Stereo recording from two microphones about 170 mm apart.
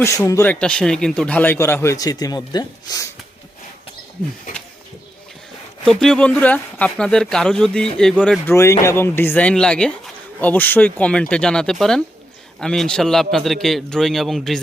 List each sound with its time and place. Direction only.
0.0 s speech: 20° left (ahead or behind)
0.5 s speech: 5° left (ahead or behind); by 3.1 s 20° left (ahead or behind)
5.8 s speech: 5° left (ahead or behind)